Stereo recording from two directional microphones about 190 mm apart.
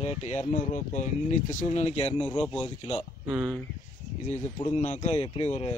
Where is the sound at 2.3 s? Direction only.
5° left (ahead or behind).